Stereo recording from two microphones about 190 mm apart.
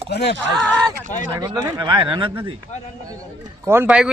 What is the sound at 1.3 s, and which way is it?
Speech, 20° right (ahead or behind).